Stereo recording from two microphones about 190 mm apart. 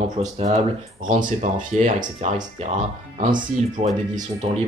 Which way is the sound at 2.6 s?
30° right (ahead or behind).